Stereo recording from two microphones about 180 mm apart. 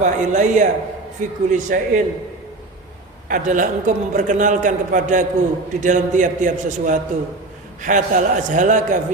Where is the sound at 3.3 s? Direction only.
45° right (ahead or behind).